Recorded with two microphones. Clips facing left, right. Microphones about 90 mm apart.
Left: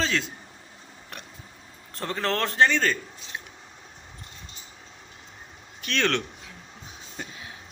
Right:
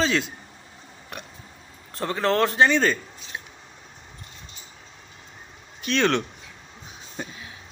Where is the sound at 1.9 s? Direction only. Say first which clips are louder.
Right 5 dB; 5° right (ahead or behind).